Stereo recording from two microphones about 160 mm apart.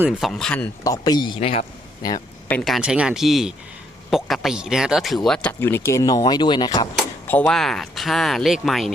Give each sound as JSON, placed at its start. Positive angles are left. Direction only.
{"t": 0.0, "sound": "speech", "side_deg": -5}
{"t": 0.9, "sound": "a man's voice", "side_deg": 25}
{"t": 2.0, "sound": "a man's voice", "side_deg": 25}
{"t": 2.5, "sound": "speech", "side_deg": 5}
{"t": 6.9, "sound": "speech", "side_deg": 10}